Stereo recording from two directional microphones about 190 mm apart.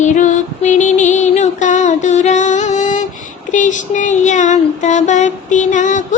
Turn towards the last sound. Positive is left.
turn(degrees=40)  # may be behind; listen again after turning